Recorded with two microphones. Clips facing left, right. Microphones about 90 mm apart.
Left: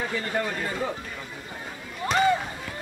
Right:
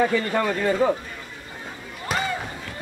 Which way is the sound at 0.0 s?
75° right (ahead or behind).